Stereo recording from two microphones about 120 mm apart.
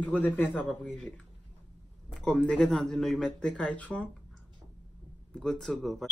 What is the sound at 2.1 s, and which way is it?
Speech, 10° left (ahead or behind).